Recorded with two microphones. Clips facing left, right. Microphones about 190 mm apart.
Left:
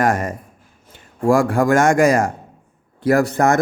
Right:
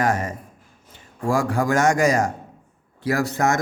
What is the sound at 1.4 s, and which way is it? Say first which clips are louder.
A man's voice: left 3 dB; 55° left (ahead or behind).